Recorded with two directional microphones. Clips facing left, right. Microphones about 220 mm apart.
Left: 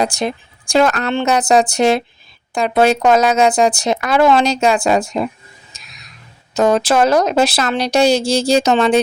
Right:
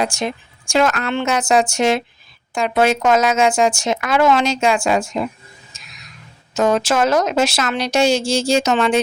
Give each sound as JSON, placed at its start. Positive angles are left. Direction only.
{"t": 0.0, "sound": "speech", "side_deg": 35}
{"t": 5.7, "sound": "a sound", "side_deg": 35}
{"t": 6.5, "sound": "speech", "side_deg": 35}